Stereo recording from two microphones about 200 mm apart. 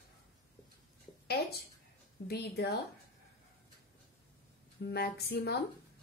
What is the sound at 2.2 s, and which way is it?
Speech, 50° left (ahead or behind).